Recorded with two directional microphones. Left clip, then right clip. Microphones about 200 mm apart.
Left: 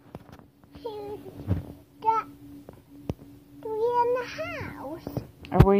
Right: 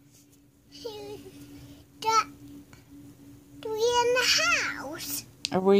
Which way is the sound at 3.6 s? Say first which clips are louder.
Even; 35° right (ahead or behind).